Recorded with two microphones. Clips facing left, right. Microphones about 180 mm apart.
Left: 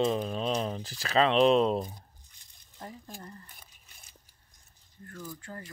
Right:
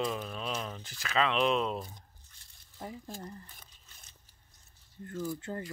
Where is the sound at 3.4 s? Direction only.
10° left (ahead or behind).